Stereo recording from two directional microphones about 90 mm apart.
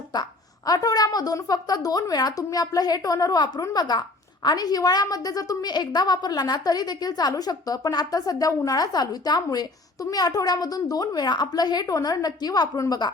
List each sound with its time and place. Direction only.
0.1 s a woman's voice: 45° left (ahead or behind)